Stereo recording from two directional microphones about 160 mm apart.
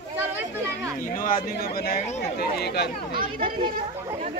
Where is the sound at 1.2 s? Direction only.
60° left (ahead or behind); by 2.9 s 90° left.